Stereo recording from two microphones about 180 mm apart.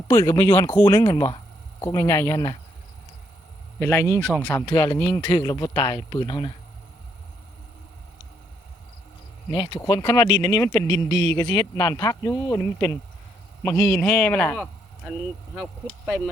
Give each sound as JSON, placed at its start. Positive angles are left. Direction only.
{"t": 0.1, "sound": "speech", "side_deg": 15}
{"t": 3.8, "sound": "speech", "side_deg": 15}
{"t": 4.6, "sound": "speech", "side_deg": 25}
{"t": 9.5, "sound": "speech", "side_deg": 25}
{"t": 16.0, "sound": "speech", "side_deg": 0}